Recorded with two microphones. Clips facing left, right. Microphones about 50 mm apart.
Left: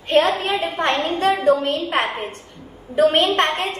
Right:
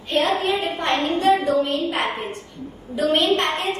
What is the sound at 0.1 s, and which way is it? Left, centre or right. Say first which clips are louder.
A child's voice: left 3 dB; left.